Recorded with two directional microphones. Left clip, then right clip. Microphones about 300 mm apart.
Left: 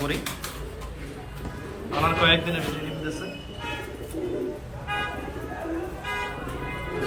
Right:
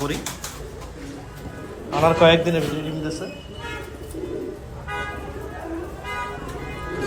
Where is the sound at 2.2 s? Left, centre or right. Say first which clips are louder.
Right 6 dB; centre.